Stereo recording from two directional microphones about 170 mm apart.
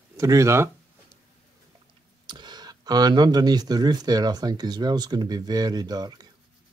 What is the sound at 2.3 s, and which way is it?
Speech, 25° right (ahead or behind).